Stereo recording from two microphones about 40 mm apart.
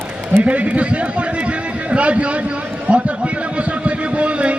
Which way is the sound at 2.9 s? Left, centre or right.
Right.